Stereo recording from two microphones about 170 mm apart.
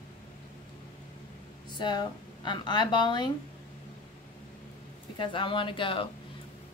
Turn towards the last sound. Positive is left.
turn(degrees=30)  # may be behind; listen again after turning